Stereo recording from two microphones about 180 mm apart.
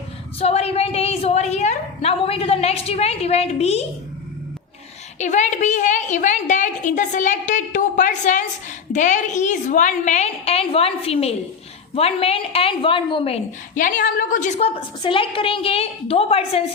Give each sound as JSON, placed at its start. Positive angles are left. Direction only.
{"t": 0.3, "sound": "a woman's voice", "side_deg": 35}
{"t": 5.2, "sound": "a woman's voice", "side_deg": 40}
{"t": 13.7, "sound": "a woman's voice", "side_deg": 45}
{"t": 15.0, "sound": "a woman's voice", "side_deg": 30}